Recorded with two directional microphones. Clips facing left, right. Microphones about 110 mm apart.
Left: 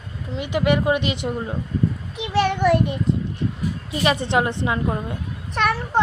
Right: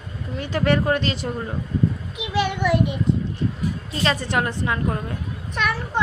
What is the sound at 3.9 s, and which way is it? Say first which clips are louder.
Speech: left 3 dB; 15° left (ahead or behind).